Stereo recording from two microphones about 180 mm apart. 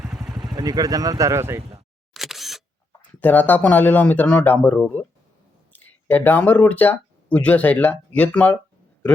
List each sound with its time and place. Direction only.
0.5 s speech: 20° right (ahead or behind)
2.1 s single-lens reflex camera: centre (ahead or behind)
3.2 s speech: 10° left (ahead or behind)